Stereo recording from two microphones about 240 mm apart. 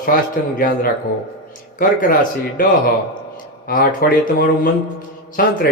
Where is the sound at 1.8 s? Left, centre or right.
Left.